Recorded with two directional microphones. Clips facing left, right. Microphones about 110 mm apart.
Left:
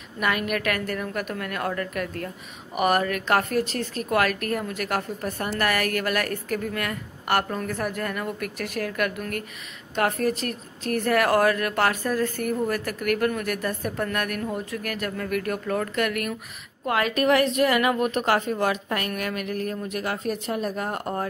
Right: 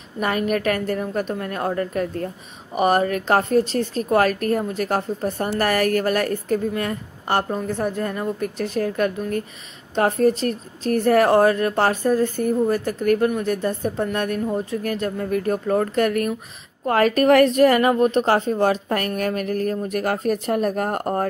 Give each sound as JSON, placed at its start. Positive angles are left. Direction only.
{"t": 0.2, "sound": "a woman's voice", "side_deg": -35}